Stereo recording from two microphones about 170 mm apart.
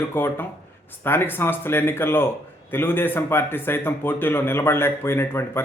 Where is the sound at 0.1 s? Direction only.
15° left (ahead or behind).